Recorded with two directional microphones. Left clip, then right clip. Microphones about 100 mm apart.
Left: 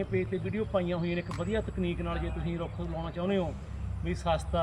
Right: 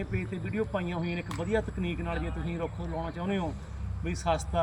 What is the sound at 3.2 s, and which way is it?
Speech, 20° left (ahead or behind).